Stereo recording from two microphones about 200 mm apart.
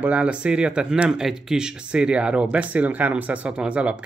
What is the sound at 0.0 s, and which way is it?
Speech, 5° right (ahead or behind).